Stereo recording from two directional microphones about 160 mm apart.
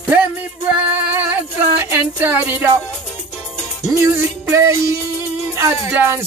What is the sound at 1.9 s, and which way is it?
Music, 10° right (ahead or behind).